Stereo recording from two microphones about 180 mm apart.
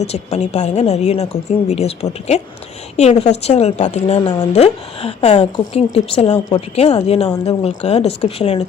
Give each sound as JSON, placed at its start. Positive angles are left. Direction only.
{"t": 0.0, "sound": "a woman's voice", "side_deg": 40}